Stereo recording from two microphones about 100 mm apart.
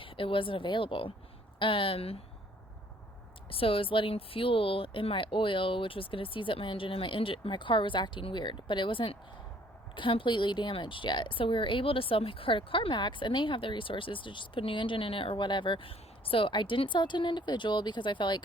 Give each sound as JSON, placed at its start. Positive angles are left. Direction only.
{"t": 0.0, "sound": "a woman's voice", "side_deg": 60}
{"t": 3.5, "sound": "a woman's voice", "side_deg": 65}